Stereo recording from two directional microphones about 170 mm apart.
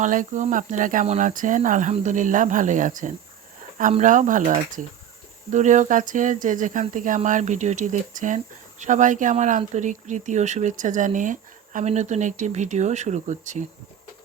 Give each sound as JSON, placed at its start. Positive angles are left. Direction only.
{"t": 0.0, "sound": "speech", "side_deg": -50}